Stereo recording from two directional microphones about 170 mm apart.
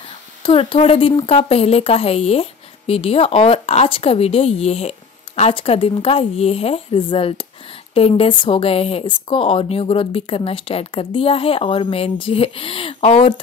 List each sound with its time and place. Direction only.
0.4 s speech: 30° left (ahead or behind)